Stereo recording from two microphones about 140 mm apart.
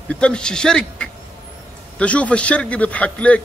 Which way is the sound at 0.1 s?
5° left (ahead or behind).